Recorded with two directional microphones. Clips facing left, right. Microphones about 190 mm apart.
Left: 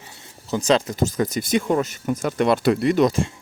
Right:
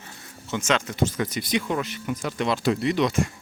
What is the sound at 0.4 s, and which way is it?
Speech, 35° left (ahead or behind).